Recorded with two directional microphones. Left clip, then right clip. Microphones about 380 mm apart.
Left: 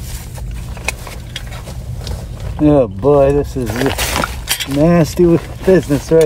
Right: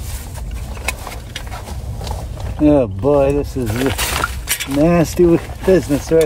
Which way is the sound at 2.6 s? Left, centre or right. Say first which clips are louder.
Left 2 dB; centre.